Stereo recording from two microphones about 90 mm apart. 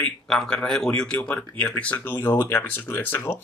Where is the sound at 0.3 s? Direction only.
5° left (ahead or behind).